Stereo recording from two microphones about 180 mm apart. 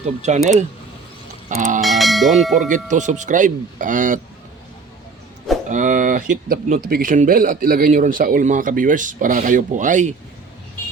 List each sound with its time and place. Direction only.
0.0 s a man's voice: 40° right (ahead or behind)
1.8 s church bell: centre (ahead or behind)
2.6 s a man's voice: 45° right (ahead or behind)
5.6 s a man's voice: 45° right (ahead or behind)